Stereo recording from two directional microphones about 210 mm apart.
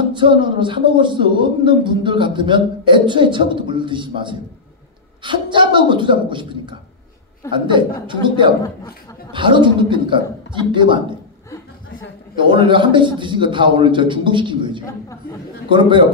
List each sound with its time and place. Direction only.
0.1 s speech: 20° right (ahead or behind)
12.4 s speech: 25° right (ahead or behind)